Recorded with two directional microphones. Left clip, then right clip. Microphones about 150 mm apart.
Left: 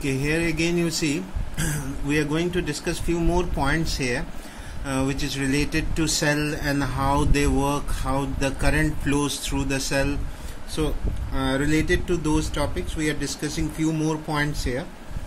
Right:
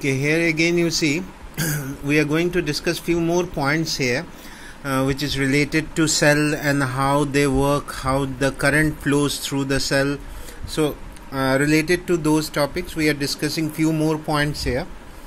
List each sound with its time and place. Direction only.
0.0 s speech: 25° right (ahead or behind)
11.3 s speech: 35° right (ahead or behind)